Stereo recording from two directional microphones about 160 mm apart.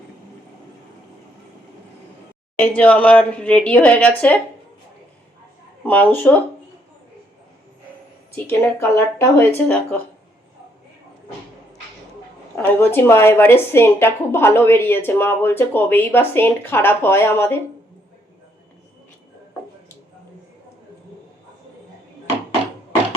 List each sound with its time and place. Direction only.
2.6 s a woman's voice: 10° left (ahead or behind)
5.8 s a woman's voice: 10° left (ahead or behind)
8.4 s a woman's voice: 15° left (ahead or behind)
12.5 s a woman's voice: 10° left (ahead or behind)